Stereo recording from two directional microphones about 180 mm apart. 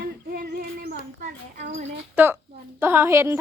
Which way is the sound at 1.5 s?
40° right (ahead or behind).